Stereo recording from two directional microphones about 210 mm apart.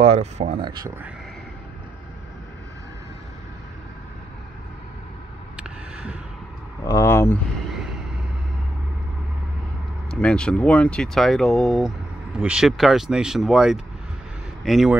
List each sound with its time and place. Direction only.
0.0 s speech: 30° right (ahead or behind)
6.8 s speech: 15° left (ahead or behind)
10.2 s speech: 5° left (ahead or behind)